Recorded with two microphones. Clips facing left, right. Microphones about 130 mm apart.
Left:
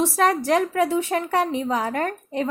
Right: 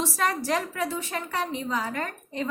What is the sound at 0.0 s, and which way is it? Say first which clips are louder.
A woman's voice: left 7 dB; 55° left (ahead or behind).